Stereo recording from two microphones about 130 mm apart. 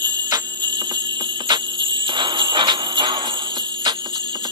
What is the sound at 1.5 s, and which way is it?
Jingle bell, 35° right (ahead or behind).